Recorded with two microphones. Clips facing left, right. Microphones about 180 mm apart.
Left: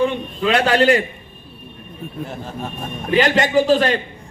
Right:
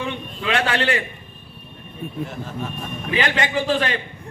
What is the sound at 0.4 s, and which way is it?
Speech, 40° left (ahead or behind).